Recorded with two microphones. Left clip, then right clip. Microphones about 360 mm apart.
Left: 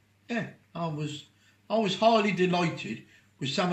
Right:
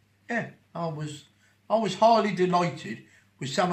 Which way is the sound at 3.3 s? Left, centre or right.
Right.